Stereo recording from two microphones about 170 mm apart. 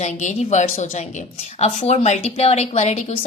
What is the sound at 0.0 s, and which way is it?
A woman's voice, 45° left (ahead or behind).